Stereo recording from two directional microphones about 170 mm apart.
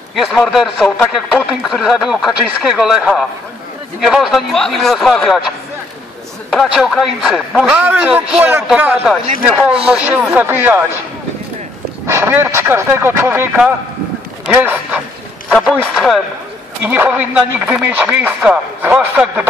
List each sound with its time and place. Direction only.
0.1 s a man's voice: centre (ahead or behind)
6.5 s a man's voice: centre (ahead or behind)
12.1 s speech: 15° right (ahead or behind)
14.4 s a sound: 10° right (ahead or behind)
15.5 s a man's voice: 5° right (ahead or behind)